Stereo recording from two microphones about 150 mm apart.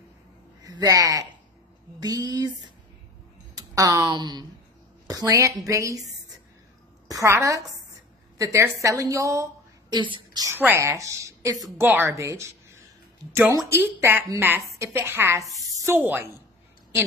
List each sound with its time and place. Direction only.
0.7 s a woman's voice: 25° right (ahead or behind)
7.1 s a woman's voice: 20° right (ahead or behind)
10.5 s a woman's voice: 15° right (ahead or behind)